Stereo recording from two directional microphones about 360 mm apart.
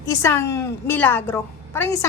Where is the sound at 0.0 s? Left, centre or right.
Centre.